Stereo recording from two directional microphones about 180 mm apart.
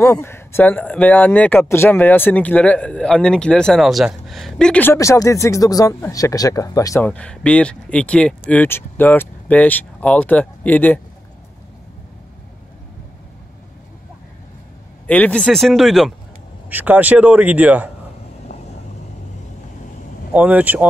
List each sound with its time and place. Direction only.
0.0 s speech: 15° left (ahead or behind)
7.1 s speech: 5° left (ahead or behind)
15.0 s a man's voice: 5° left (ahead or behind); by 17.9 s 10° right (ahead or behind)
20.3 s a man's voice: 10° right (ahead or behind)